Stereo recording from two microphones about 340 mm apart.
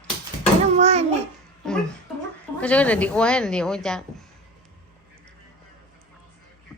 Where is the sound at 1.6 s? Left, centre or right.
Centre.